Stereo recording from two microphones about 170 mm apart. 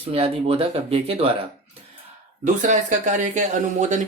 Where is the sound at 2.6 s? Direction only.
45° right (ahead or behind).